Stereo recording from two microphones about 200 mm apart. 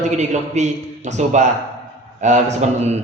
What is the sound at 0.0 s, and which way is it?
A man's voice, 35° right (ahead or behind).